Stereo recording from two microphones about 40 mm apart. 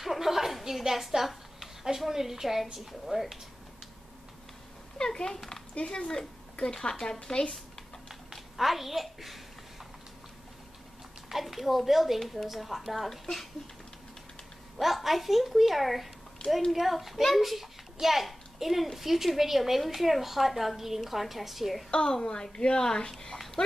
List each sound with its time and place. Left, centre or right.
0.0 s a sound: centre
2.0 s a woman's voice: centre
4.9 s a child's voice: centre
5.8 s a woman's voice: left
8.3 s a child's voice: centre
11.2 s a woman's voice: centre
14.8 s a woman's voice: centre
21.9 s a woman's voice: centre
23.3 s dog: centre